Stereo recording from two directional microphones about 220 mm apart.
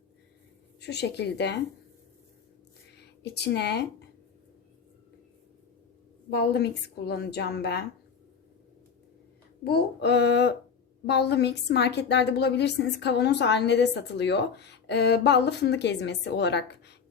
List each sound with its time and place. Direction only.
0.8 s a woman's voice: 50° left (ahead or behind)
3.0 s speech: 50° left (ahead or behind)
6.3 s a woman's voice: 50° left (ahead or behind)
9.6 s a woman's voice: 50° left (ahead or behind)